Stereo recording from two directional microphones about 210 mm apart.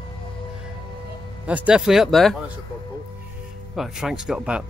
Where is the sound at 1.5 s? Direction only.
5° right (ahead or behind).